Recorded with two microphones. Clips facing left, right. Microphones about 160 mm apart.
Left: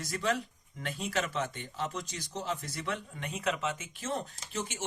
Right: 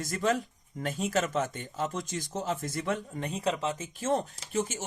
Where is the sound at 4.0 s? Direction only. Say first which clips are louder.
Right 7 dB; 45° right (ahead or behind).